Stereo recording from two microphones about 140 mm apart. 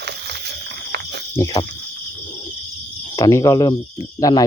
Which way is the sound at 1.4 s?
30° left (ahead or behind).